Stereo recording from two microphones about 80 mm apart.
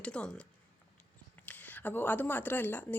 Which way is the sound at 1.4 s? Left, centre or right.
Left.